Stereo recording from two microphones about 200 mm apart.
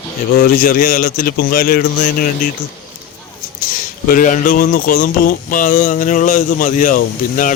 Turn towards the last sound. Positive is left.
turn(degrees=40)  # may be behind; listen again after turning